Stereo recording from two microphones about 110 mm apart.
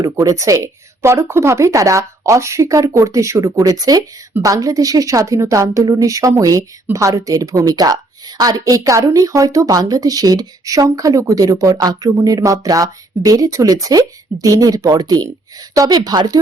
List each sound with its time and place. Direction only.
0.0 s a woman's voice: 30° right (ahead or behind)